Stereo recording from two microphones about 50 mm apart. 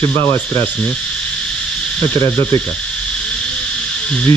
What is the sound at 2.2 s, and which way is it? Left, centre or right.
Speech, left.